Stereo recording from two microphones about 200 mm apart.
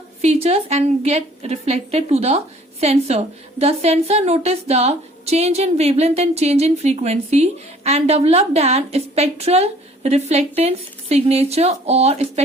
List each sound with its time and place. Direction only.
0.2 s a woman's voice: 30° right (ahead or behind)